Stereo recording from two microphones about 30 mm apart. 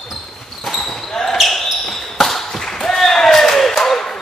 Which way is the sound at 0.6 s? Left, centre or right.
Centre.